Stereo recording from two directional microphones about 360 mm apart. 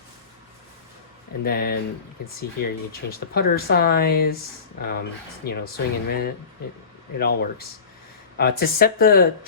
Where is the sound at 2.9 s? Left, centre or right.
Left.